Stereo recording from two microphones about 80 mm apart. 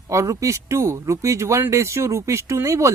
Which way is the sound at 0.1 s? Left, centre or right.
Right.